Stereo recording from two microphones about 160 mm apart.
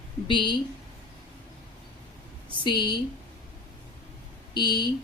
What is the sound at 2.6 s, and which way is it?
Speech, 30° left (ahead or behind).